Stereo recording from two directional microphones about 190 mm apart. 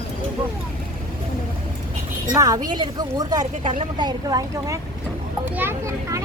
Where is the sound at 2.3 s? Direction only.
20° right (ahead or behind).